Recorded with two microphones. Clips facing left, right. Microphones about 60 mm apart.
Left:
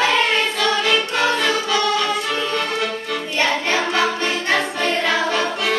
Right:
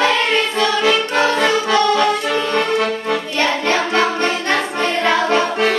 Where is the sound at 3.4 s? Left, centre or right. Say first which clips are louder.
Right 1 dB; centre.